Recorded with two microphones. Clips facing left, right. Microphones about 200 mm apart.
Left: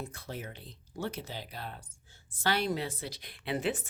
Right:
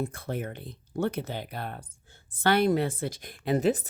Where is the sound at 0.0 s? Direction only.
55° right (ahead or behind).